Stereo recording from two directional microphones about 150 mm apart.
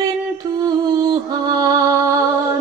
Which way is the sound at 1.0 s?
25° right (ahead or behind).